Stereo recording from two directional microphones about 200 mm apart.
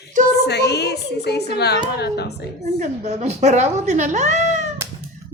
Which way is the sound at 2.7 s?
35° right (ahead or behind).